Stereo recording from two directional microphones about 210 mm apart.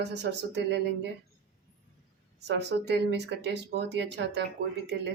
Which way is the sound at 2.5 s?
55° right (ahead or behind).